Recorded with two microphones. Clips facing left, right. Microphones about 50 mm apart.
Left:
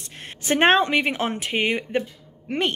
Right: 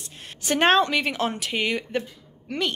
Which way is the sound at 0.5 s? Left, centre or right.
Left.